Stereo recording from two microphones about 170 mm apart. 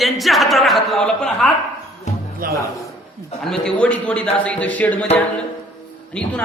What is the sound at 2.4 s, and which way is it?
Speech, 55° right (ahead or behind).